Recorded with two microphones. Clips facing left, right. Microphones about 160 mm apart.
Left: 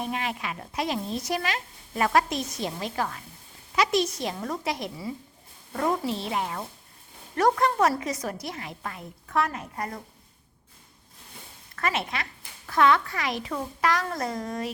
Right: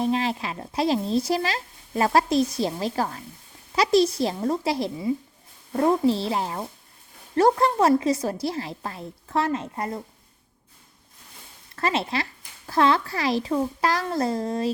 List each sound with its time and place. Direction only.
0.0 s a woman's voice: 30° right (ahead or behind)
11.8 s a woman's voice: 30° right (ahead or behind)